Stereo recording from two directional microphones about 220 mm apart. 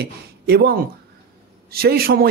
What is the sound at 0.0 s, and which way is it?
Speech, 45° right (ahead or behind).